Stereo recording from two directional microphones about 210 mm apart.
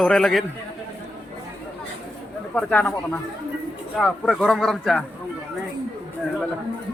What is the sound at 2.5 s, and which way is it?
Speech, 5° left (ahead or behind).